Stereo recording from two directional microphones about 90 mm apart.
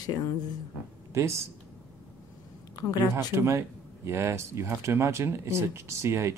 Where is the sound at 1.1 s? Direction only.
30° right (ahead or behind).